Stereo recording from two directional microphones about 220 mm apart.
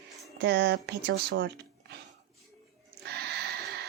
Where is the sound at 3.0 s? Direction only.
50° right (ahead or behind).